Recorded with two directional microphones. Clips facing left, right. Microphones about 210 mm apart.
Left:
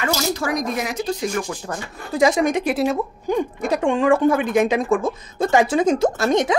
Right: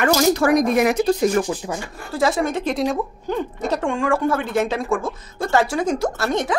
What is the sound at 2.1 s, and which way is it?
A woman's voice, 15° left (ahead or behind).